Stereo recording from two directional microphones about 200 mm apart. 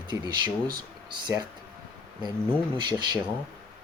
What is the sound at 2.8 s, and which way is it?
Speech, 20° right (ahead or behind).